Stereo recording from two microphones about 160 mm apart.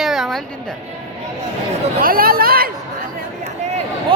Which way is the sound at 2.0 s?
65° right (ahead or behind).